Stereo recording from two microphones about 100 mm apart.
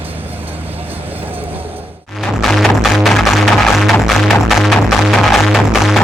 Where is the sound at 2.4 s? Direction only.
Centre (ahead or behind).